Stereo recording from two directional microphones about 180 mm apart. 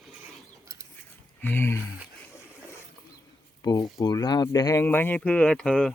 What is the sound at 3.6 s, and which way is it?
Speech, 20° left (ahead or behind).